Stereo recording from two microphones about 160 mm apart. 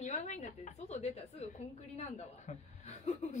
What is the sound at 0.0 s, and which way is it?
A woman's voice, 45° left (ahead or behind).